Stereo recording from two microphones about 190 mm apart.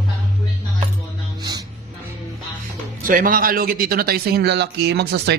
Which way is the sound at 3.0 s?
45° right (ahead or behind).